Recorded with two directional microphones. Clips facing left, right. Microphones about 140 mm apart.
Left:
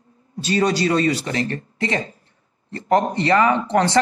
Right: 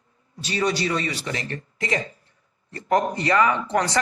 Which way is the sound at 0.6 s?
35° left (ahead or behind).